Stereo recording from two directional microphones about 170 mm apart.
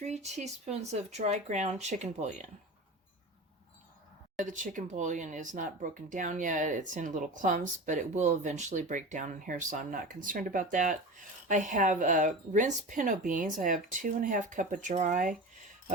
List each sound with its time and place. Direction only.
0.0 s speech: 40° right (ahead or behind)
4.4 s speech: 45° right (ahead or behind)